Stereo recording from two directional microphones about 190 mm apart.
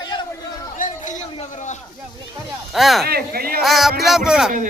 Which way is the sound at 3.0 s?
55° right (ahead or behind).